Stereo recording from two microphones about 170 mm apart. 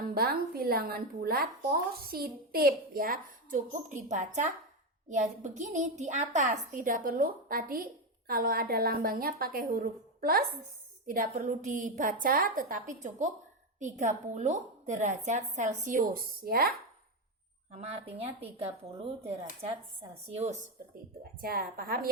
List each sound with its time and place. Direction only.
0.1 s speech: 65° right (ahead or behind)
17.7 s a woman's voice: 40° right (ahead or behind)
21.4 s speech: 60° right (ahead or behind)